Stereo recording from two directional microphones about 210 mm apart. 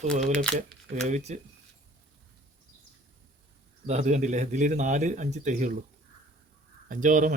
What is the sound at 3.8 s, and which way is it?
A man's voice, 35° right (ahead or behind).